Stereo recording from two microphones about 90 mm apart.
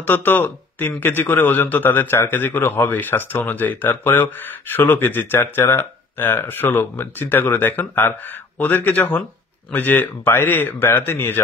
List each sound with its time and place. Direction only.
0.0 s a man's voice: 20° left (ahead or behind)